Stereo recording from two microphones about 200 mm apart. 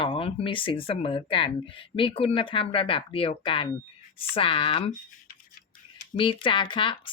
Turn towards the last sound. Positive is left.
turn(degrees=25)  # may be behind; listen again after turning